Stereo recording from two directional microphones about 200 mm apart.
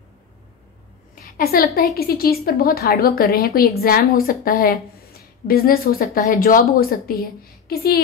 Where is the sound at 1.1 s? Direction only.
50° left (ahead or behind).